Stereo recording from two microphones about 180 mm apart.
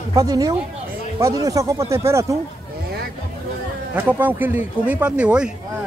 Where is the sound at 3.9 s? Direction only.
10° right (ahead or behind).